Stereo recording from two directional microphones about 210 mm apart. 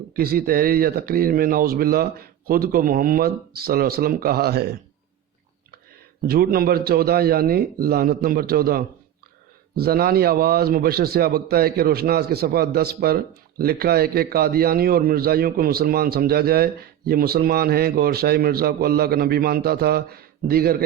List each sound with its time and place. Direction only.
0.1 s a man's voice: 45° right (ahead or behind)
6.2 s a man's voice: 45° right (ahead or behind)